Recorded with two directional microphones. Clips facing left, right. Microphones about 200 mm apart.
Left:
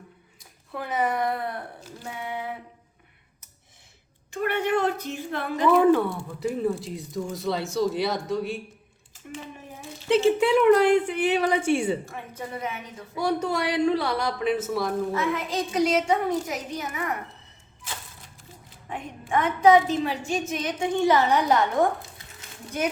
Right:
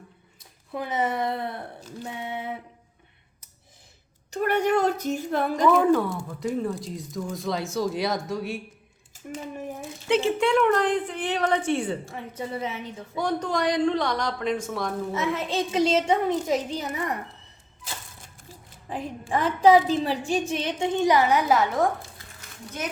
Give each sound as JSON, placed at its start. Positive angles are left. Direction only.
{"t": 0.7, "sound": "a woman's voice", "side_deg": -20}
{"t": 4.3, "sound": "a woman's voice", "side_deg": -40}
{"t": 6.6, "sound": "speech", "side_deg": 5}
{"t": 10.1, "sound": "a woman's voice", "side_deg": 0}
{"t": 12.0, "sound": "a woman's voice", "side_deg": -25}
{"t": 13.1, "sound": "a woman's voice", "side_deg": 10}
{"t": 15.1, "sound": "a woman's voice", "side_deg": -25}
{"t": 18.9, "sound": "a woman's voice", "side_deg": -35}
{"t": 22.4, "sound": "a sound", "side_deg": 15}